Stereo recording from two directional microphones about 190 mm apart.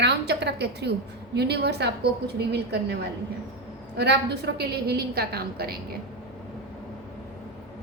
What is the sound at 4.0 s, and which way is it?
A woman's voice, 60° right (ahead or behind).